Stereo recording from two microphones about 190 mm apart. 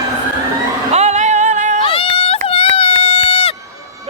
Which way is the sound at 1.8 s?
30° left (ahead or behind).